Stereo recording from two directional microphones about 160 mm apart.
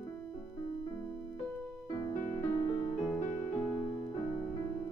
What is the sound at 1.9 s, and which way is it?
Music, 20° left (ahead or behind).